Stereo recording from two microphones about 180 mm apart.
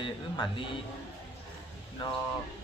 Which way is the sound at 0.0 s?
25° left (ahead or behind).